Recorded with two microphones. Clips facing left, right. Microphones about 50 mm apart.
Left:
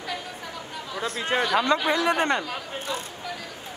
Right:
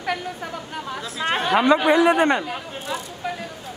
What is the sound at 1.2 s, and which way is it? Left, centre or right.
Speech, right.